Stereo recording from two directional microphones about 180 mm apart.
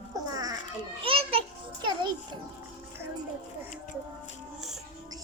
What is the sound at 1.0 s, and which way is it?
Speech, 30° right (ahead or behind).